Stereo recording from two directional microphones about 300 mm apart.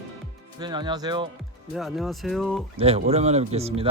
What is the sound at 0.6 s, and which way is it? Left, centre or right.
Speech, centre.